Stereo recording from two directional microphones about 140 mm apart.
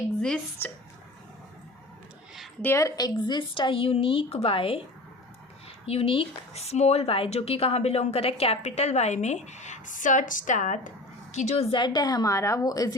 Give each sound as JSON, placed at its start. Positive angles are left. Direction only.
{"t": 0.2, "sound": "speech", "side_deg": 5}
{"t": 2.6, "sound": "speech", "side_deg": 20}
{"t": 11.8, "sound": "a woman's voice", "side_deg": 30}